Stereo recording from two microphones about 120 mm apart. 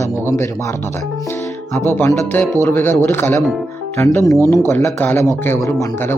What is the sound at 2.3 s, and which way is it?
Speech, 15° left (ahead or behind).